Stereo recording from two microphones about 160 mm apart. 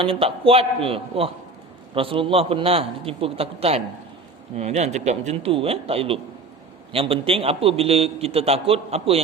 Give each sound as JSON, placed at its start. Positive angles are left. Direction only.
{"t": 0.0, "sound": "a man's voice", "side_deg": -35}